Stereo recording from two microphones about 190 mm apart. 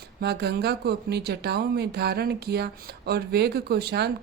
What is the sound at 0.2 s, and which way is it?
Speech, 60° right (ahead or behind).